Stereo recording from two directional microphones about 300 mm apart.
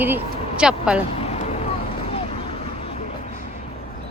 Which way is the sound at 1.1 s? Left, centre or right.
Centre.